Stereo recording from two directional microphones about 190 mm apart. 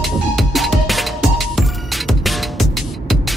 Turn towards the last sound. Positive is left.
turn(degrees=0)  # may be behind; listen again after turning